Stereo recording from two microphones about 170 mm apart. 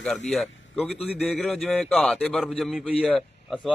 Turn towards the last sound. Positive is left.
turn(degrees=0)  # may be behind; listen again after turning